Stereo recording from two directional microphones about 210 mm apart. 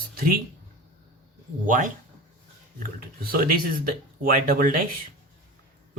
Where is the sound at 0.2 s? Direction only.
40° right (ahead or behind).